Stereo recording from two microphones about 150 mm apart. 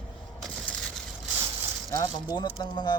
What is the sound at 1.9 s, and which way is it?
Speech, 25° left (ahead or behind).